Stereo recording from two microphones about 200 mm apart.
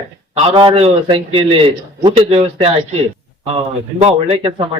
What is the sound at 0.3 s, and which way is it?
A man's voice, 30° right (ahead or behind).